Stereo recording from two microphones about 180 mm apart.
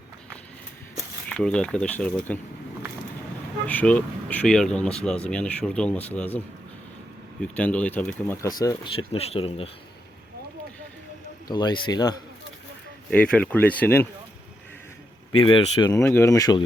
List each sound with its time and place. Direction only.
1.3 s speech: 5° left (ahead or behind)
3.7 s speech: 10° left (ahead or behind)
7.5 s speech: 5° left (ahead or behind); by 9.6 s 35° left (ahead or behind)
11.4 s speech: 25° left (ahead or behind)
13.1 s speech: 5° left (ahead or behind)
15.4 s speech: 30° left (ahead or behind)
15.9 s speech: 15° left (ahead or behind)